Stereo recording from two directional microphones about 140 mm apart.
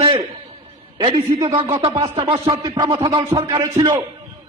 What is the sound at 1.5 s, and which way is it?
A man's voice, 35° right (ahead or behind).